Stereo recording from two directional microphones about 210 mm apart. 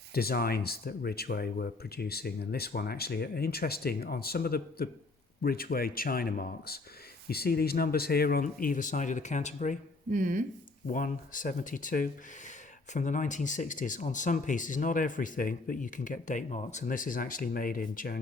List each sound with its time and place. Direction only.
0.1 s speech: 45° left (ahead or behind)
10.1 s speech: 40° right (ahead or behind)
10.8 s speech: 40° left (ahead or behind)